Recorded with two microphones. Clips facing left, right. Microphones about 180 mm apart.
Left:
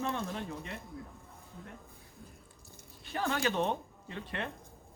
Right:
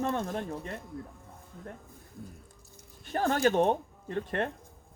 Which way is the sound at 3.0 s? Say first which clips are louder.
Right 6 dB; 50° right (ahead or behind).